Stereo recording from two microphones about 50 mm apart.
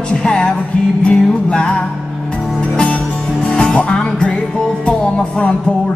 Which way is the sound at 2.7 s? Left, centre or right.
Left.